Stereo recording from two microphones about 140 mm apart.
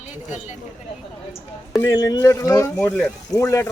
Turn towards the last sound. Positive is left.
turn(degrees=20)  # may be behind; listen again after turning